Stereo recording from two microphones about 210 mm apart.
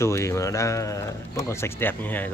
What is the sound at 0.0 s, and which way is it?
Speech, 15° left (ahead or behind).